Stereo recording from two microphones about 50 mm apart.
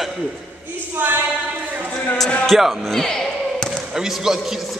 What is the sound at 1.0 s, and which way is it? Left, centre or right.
Speech, right.